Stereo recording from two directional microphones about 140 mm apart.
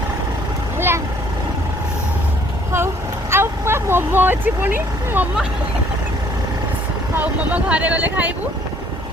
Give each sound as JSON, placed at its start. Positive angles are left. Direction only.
{"t": 0.8, "sound": "vehicle", "side_deg": -15}
{"t": 2.7, "sound": "vehicle", "side_deg": -15}
{"t": 7.1, "sound": "speech", "side_deg": -10}